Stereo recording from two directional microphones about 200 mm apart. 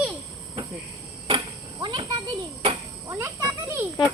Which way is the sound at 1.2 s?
25° right (ahead or behind).